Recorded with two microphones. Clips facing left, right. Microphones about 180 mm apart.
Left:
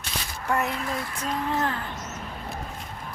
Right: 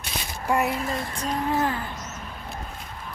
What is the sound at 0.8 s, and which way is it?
Female singing, 25° right (ahead or behind).